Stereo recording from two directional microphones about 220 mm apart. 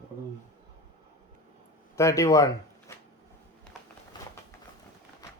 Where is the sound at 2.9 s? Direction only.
10° left (ahead or behind).